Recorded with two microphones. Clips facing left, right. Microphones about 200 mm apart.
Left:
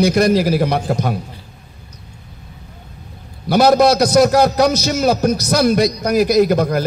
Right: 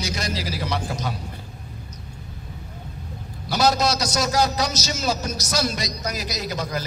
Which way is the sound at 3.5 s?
55° left (ahead or behind).